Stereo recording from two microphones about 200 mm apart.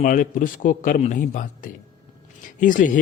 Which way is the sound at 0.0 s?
40° left (ahead or behind).